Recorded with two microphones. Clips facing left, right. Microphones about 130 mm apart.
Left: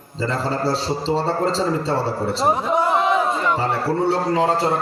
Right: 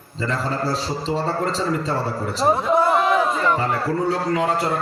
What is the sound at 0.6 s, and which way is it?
A man's voice, 30° left (ahead or behind).